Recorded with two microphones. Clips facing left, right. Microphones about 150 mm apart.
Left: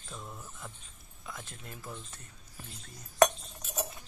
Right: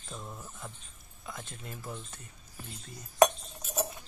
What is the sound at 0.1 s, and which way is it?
Mantra, 10° right (ahead or behind).